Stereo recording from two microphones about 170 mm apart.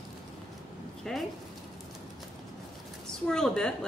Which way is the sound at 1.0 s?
Centre (ahead or behind).